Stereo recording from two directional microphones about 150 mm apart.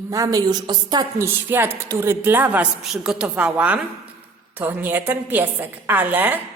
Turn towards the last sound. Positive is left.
turn(degrees=-10)  # may be behind; listen again after turning